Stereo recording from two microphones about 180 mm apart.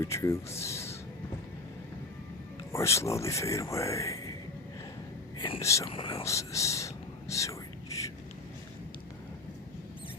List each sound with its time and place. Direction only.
0.0 s speech: 15° left (ahead or behind)
0.6 s a sound: 15° left (ahead or behind)
2.7 s speech: 15° left (ahead or behind)
5.5 s speech: 15° left (ahead or behind)
5.9 s speech: 30° left (ahead or behind)
6.2 s whispering: 15° left (ahead or behind)